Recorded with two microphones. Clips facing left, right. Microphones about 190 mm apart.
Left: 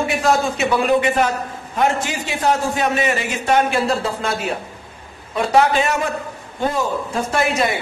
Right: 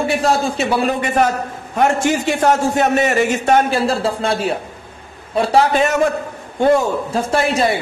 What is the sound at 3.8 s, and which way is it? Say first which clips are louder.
A man's voice: right 3 dB; 30° right (ahead or behind).